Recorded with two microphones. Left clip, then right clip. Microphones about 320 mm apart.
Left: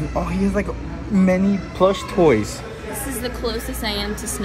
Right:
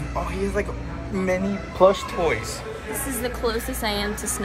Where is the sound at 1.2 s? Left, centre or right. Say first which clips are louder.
Left 4 dB; centre.